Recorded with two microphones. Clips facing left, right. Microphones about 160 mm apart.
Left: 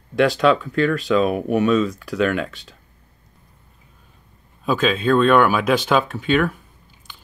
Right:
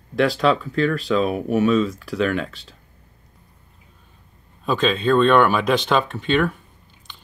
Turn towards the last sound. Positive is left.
turn(degrees=5)  # may be behind; listen again after turning